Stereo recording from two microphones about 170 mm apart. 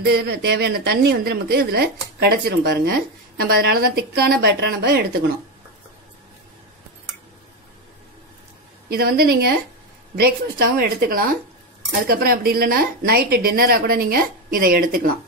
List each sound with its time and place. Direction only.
0.0 s a woman's voice: 70° right (ahead or behind)
8.8 s a woman's voice: 65° right (ahead or behind)